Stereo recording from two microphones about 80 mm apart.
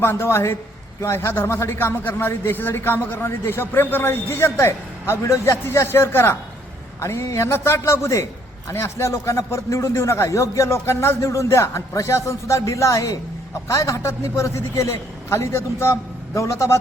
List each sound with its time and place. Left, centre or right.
0.0 s a man's voice: left